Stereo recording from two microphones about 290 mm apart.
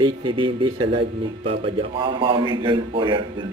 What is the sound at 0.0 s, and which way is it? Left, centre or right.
A man's voice, centre.